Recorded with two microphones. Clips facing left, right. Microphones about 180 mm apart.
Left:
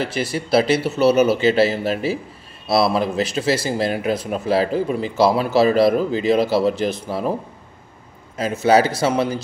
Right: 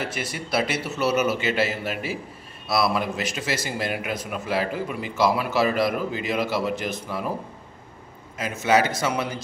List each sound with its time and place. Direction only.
0.0 s speech: 30° left (ahead or behind)
8.4 s speech: 35° left (ahead or behind)